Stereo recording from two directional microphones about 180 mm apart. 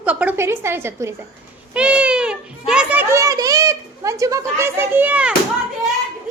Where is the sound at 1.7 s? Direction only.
5° right (ahead or behind).